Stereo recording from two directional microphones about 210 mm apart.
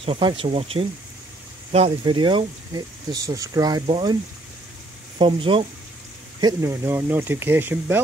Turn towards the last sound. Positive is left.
turn(degrees=-10)  # may be behind; listen again after turning